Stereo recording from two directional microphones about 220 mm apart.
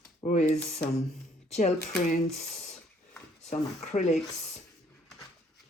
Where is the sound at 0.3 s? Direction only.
30° left (ahead or behind).